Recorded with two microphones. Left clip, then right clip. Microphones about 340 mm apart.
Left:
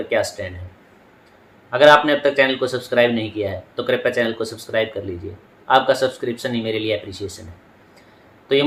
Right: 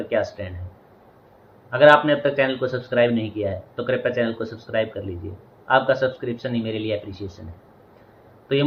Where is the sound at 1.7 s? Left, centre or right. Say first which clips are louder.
Left 2 dB; centre.